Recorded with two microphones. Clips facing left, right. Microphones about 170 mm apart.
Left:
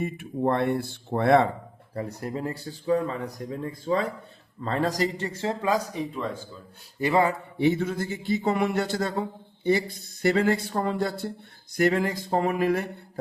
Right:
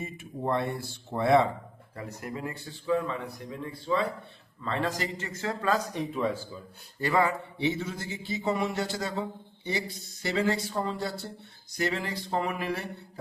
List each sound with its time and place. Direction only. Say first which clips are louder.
0.0 s speech: left 7 dB; 60° left (ahead or behind)
2.0 s a man's voice: left 6 dB; 35° left (ahead or behind)
5.9 s speech: right 1 dB; centre (ahead or behind)
7.0 s speech: left 3 dB; 25° left (ahead or behind)
7.6 s speech: left 7 dB; 55° left (ahead or behind)